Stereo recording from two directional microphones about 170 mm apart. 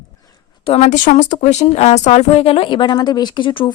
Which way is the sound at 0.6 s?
35° left (ahead or behind).